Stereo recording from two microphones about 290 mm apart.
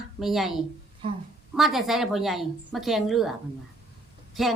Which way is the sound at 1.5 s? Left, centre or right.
Centre.